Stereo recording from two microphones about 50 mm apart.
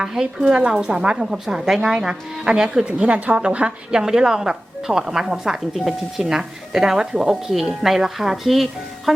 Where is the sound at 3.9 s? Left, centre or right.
Centre.